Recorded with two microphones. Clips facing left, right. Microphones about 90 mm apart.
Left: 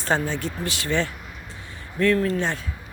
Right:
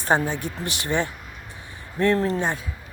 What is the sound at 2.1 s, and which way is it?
Speech, 30° right (ahead or behind).